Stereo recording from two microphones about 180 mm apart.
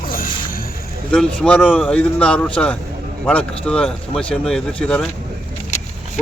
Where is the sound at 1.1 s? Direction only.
5° left (ahead or behind).